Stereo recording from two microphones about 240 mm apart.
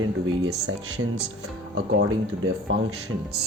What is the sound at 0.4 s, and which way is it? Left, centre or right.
Speech, right.